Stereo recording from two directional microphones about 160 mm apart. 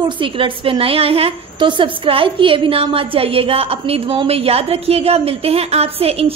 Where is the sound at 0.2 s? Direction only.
35° right (ahead or behind).